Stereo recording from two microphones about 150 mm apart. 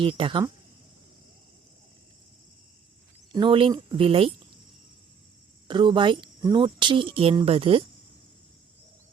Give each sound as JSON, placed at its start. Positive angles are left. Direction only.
{"t": 0.0, "sound": "speech", "side_deg": -35}
{"t": 3.3, "sound": "speech", "side_deg": -35}
{"t": 5.6, "sound": "speech", "side_deg": -30}